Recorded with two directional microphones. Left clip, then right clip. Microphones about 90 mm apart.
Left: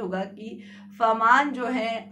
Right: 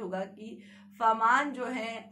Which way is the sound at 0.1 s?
25° left (ahead or behind).